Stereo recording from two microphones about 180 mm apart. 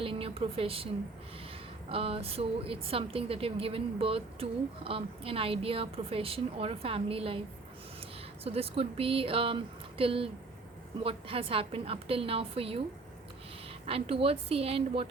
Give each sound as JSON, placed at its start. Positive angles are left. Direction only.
{"t": 0.0, "sound": "a sound", "side_deg": -30}
{"t": 1.9, "sound": "a woman's voice", "side_deg": -30}
{"t": 8.4, "sound": "a woman's voice", "side_deg": -35}
{"t": 13.8, "sound": "a woman's voice", "side_deg": -30}